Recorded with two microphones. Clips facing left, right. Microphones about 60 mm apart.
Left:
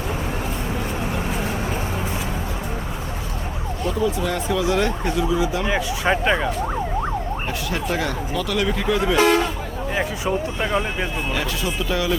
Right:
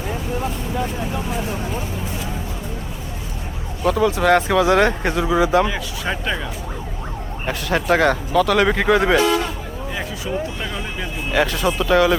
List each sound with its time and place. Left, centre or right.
3.8 s speech: right
5.6 s speech: left
7.4 s speech: right
10.2 s speech: left
11.3 s speech: right